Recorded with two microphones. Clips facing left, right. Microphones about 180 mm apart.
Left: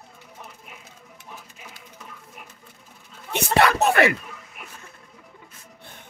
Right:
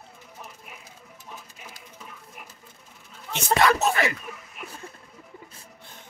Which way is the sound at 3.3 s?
60° left (ahead or behind).